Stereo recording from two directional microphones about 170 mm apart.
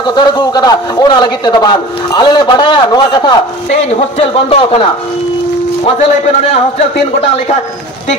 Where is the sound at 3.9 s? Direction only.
35° left (ahead or behind).